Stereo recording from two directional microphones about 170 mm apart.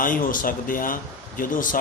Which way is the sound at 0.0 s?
55° left (ahead or behind).